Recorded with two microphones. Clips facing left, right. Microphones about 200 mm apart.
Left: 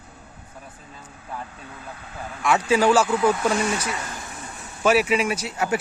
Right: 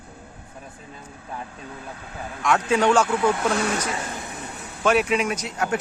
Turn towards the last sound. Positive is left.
turn(degrees=5)  # may be behind; listen again after turning